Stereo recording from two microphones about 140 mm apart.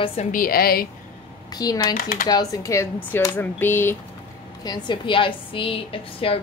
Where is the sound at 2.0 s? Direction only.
90° left.